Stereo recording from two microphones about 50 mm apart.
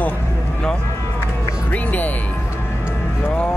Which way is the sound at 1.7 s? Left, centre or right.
Left.